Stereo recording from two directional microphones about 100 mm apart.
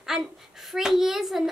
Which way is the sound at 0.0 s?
5° right (ahead or behind).